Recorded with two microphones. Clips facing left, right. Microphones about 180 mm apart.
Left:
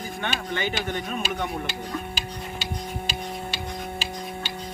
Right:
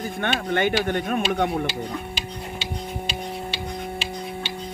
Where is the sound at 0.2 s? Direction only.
55° right (ahead or behind).